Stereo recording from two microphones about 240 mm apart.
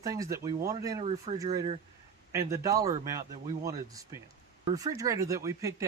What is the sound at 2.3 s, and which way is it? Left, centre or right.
Speech, centre.